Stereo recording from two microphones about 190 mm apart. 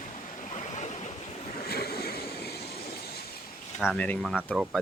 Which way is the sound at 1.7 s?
55° left (ahead or behind).